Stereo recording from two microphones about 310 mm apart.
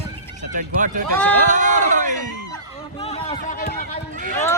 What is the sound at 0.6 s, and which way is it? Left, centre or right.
Speech, right.